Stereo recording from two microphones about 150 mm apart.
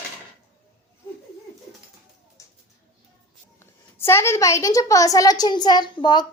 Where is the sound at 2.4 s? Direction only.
20° left (ahead or behind).